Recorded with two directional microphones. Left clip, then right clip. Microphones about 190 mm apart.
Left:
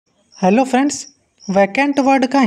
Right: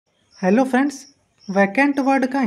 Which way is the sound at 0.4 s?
35° left (ahead or behind).